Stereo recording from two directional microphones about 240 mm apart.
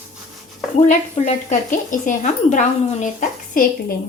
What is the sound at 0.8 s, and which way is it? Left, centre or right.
Speech, left.